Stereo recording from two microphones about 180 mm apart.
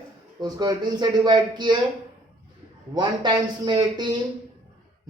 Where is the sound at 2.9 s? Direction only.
25° right (ahead or behind).